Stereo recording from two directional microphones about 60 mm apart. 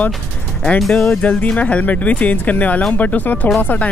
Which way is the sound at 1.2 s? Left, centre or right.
Left.